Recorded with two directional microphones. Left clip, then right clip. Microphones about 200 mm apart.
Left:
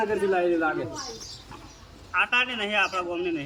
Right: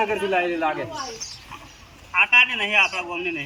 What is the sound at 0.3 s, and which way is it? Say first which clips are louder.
Speech: right 2 dB; 25° right (ahead or behind).